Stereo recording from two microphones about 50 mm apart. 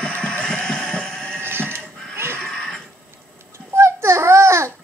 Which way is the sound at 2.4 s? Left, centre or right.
Centre.